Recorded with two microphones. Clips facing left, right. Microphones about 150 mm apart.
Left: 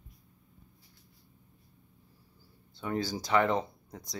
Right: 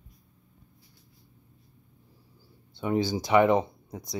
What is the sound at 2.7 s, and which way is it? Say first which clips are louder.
Speech: right 6 dB; 15° right (ahead or behind).